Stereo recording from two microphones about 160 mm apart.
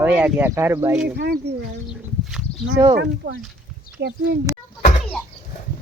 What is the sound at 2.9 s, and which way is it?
Speech, 90° right.